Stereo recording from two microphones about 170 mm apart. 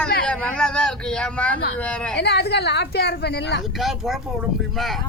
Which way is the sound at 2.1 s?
80° left.